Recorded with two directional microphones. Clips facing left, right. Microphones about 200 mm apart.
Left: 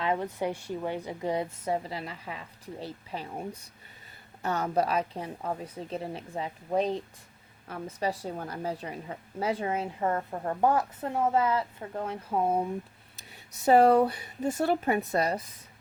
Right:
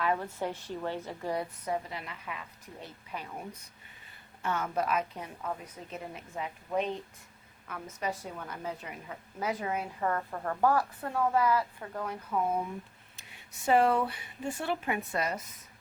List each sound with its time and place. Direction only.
0.0 s a woman's voice: 20° left (ahead or behind); by 15.4 s 35° left (ahead or behind)